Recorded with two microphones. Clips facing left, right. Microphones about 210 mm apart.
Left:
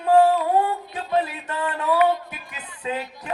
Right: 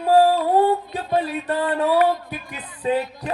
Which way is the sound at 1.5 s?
35° right (ahead or behind).